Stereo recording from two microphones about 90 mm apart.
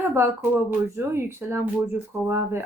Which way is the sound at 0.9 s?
25° right (ahead or behind).